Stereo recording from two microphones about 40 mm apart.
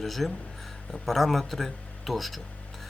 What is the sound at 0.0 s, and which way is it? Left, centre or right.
Speech, centre.